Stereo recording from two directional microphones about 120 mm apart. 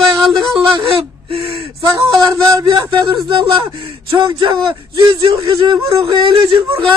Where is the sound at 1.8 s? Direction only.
30° right (ahead or behind).